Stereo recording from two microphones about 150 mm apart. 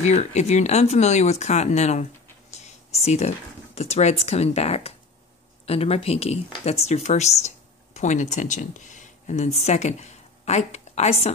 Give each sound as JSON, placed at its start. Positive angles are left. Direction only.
{"t": 0.0, "sound": "speech", "side_deg": 50}
{"t": 2.5, "sound": "a sound", "side_deg": 45}
{"t": 3.7, "sound": "speech", "side_deg": 45}